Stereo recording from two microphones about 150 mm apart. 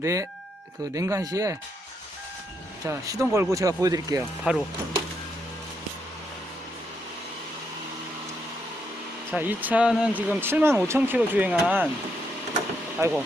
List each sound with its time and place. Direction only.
0.0 s speech: 20° right (ahead or behind)
2.8 s speech: 20° right (ahead or behind)
4.5 s speech: 5° right (ahead or behind)
9.3 s speech: 10° right (ahead or behind)
13.0 s speech: 10° right (ahead or behind)